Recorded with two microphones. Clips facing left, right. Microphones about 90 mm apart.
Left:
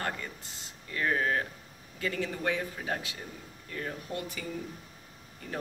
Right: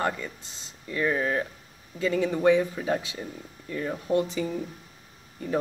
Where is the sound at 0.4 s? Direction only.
20° right (ahead or behind).